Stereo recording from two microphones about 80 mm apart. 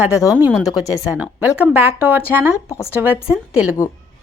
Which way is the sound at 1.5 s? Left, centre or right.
Right.